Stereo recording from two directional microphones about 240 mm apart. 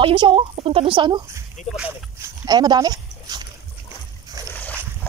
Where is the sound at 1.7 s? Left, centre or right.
Centre.